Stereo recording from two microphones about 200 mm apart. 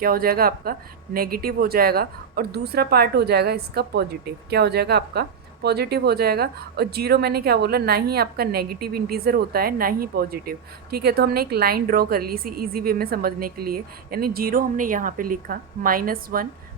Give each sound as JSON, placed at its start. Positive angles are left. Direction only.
{"t": 0.0, "sound": "a woman's voice", "side_deg": -50}